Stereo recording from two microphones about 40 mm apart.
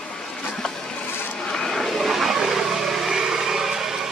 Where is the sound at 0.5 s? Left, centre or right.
Centre.